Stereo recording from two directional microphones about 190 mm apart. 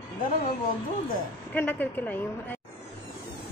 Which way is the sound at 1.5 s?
10° left (ahead or behind).